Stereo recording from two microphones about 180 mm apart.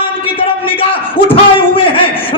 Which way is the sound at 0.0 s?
30° left (ahead or behind).